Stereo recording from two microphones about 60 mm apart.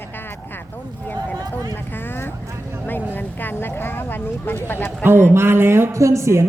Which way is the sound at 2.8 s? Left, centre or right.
Left.